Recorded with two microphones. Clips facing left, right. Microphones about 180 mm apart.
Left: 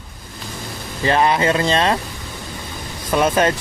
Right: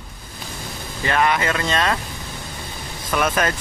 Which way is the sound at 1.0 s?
30° left (ahead or behind).